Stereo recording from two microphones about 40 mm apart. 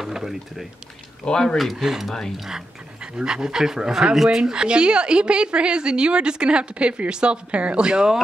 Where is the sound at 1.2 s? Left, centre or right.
Centre.